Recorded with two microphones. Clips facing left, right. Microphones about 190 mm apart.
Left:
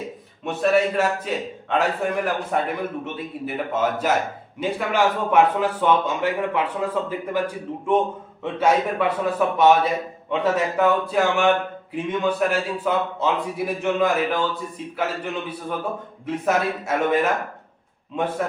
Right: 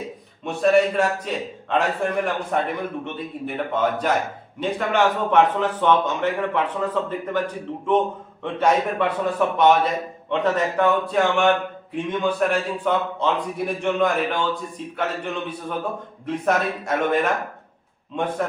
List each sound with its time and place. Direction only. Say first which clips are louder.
0.4 s a man's voice: right 2 dB; centre (ahead or behind)